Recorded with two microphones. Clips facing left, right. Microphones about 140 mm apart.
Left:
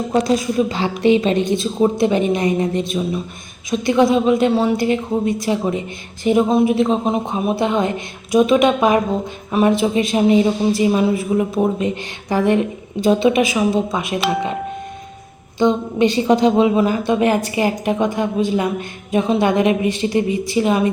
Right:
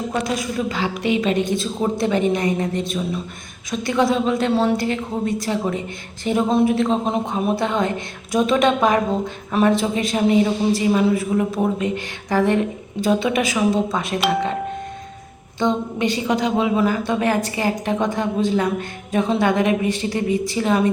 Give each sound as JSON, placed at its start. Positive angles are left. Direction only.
{"t": 0.7, "sound": "a woman's voice", "side_deg": 25}
{"t": 15.5, "sound": "a woman's voice", "side_deg": 15}
{"t": 16.0, "sound": "a woman's voice", "side_deg": 30}